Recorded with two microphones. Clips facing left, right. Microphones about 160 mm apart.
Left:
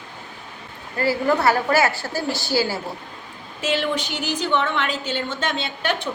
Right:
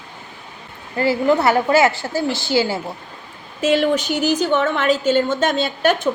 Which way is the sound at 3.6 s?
45° right (ahead or behind).